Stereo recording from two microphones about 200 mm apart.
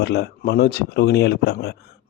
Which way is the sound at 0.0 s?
55° left (ahead or behind).